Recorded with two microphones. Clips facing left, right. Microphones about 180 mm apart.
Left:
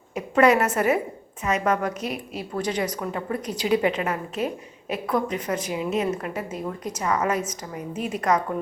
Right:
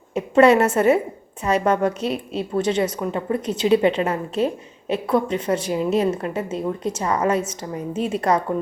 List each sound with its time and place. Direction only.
0.1 s a woman's voice: 25° right (ahead or behind)